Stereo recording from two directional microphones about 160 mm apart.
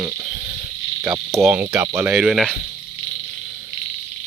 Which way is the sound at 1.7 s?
15° right (ahead or behind).